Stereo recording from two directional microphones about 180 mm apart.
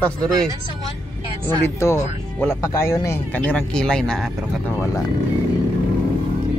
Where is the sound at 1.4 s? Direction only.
15° left (ahead or behind).